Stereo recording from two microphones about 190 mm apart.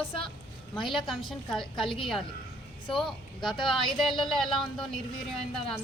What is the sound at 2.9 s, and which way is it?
A woman's voice, centre (ahead or behind).